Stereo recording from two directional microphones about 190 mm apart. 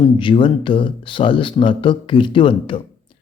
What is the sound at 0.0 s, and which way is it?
A man's voice, 25° left (ahead or behind).